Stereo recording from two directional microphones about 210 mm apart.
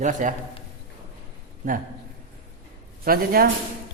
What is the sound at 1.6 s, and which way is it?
Speech, 40° right (ahead or behind).